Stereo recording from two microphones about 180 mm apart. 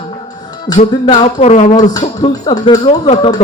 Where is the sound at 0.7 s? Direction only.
30° left (ahead or behind).